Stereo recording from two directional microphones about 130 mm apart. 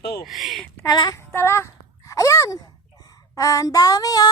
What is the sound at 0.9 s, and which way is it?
Child singing, 30° left (ahead or behind).